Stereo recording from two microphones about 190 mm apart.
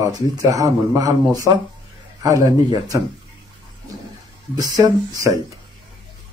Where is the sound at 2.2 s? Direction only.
20° right (ahead or behind).